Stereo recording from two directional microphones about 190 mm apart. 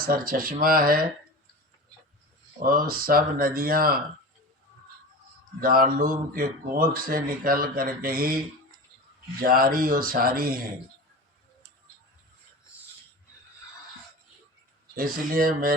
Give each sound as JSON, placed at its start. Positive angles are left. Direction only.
{"t": 0.0, "sound": "a man's voice", "side_deg": -50}
{"t": 2.6, "sound": "a man's voice", "side_deg": -50}
{"t": 5.5, "sound": "a man's voice", "side_deg": -50}
{"t": 9.4, "sound": "a man's voice", "side_deg": -50}
{"t": 14.9, "sound": "a man's voice", "side_deg": -50}